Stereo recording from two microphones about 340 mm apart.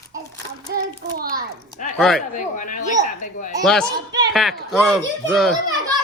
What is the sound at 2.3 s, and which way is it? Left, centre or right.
Speech, left.